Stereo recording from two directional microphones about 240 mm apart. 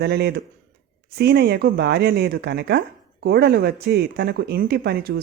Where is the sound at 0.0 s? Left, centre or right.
Right.